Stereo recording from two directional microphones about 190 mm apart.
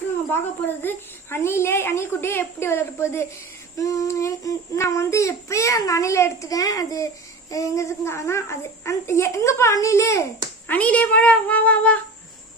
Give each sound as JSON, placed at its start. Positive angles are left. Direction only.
{"t": 0.8, "sound": "child singing", "side_deg": 10}